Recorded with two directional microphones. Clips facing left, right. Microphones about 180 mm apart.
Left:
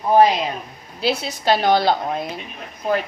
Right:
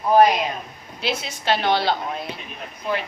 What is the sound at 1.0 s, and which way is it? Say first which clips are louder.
A woman's voice: left 5 dB; 35° left (ahead or behind).